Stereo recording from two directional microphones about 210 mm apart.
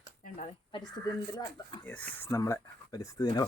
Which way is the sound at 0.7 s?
20° left (ahead or behind).